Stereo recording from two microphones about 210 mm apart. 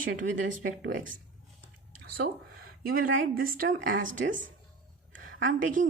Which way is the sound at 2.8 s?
45° right (ahead or behind).